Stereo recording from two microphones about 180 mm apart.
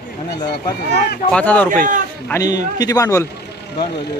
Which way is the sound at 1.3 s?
10° left (ahead or behind).